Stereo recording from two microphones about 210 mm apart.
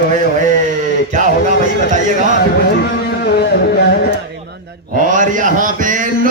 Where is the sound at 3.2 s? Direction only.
50° left (ahead or behind).